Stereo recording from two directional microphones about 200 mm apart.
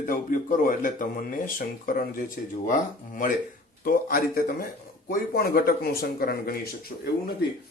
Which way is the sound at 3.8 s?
45° left (ahead or behind).